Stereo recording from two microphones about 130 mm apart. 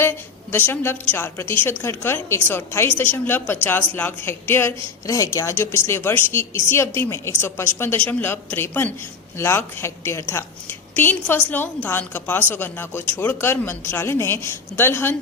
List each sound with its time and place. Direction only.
0.0 s a woman's voice: 15° left (ahead or behind)